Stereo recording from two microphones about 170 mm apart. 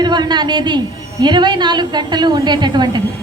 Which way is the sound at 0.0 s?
25° right (ahead or behind).